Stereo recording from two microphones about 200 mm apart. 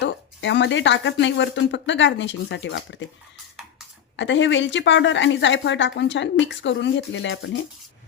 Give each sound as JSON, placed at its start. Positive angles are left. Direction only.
{"t": 0.0, "sound": "speech", "side_deg": 60}
{"t": 4.2, "sound": "speech", "side_deg": 65}